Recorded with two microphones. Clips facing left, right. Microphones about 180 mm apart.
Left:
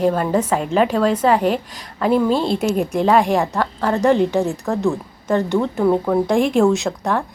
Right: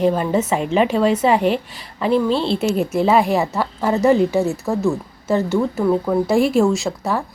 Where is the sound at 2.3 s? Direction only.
45° left (ahead or behind).